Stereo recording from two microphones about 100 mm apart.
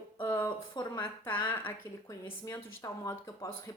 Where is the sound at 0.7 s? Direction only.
50° left (ahead or behind).